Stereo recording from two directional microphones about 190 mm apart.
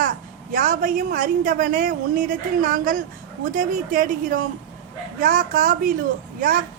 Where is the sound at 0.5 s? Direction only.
45° right (ahead or behind).